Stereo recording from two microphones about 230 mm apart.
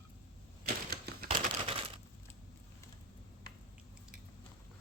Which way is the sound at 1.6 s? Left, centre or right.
Right.